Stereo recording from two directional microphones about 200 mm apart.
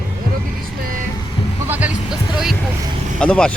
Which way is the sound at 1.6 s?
10° right (ahead or behind).